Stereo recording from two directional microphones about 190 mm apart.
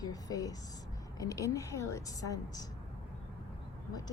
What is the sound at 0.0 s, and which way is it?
A woman's voice, 20° left (ahead or behind).